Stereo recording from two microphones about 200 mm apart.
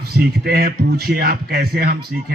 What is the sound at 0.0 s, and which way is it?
A man's voice, 50° right (ahead or behind).